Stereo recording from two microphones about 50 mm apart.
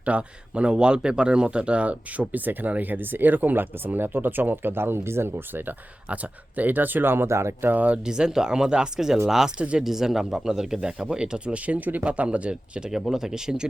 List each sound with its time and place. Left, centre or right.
0.0 s speech: right
6.6 s speech: right
7.3 s speech: right
7.7 s speech: right
8.0 s speech: centre
9.8 s speech: centre
12.9 s speech: centre